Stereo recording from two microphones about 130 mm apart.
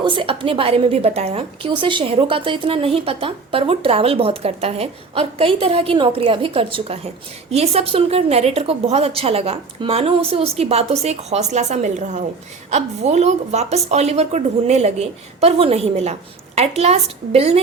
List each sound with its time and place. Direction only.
0.0 s a woman's voice: 40° right (ahead or behind)